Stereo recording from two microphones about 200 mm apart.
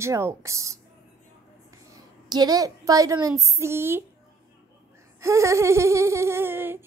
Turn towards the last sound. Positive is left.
turn(degrees=-10)  # may be behind; listen again after turning